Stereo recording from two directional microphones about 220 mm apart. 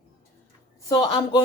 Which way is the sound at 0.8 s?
20° left (ahead or behind).